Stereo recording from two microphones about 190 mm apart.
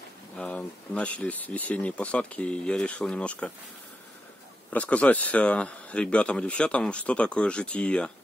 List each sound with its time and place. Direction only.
0.4 s speech: 5° left (ahead or behind)
4.6 s speech: 5° left (ahead or behind)